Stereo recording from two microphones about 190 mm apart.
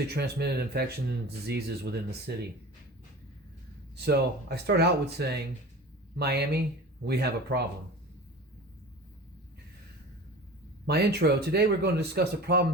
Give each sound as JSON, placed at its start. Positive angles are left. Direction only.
{"t": 0.1, "sound": "speech", "side_deg": -60}
{"t": 4.0, "sound": "speech", "side_deg": -55}
{"t": 10.8, "sound": "speech", "side_deg": -60}